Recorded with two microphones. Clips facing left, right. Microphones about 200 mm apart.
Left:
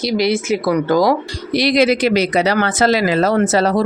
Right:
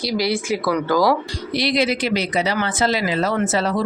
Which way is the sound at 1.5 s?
90° left.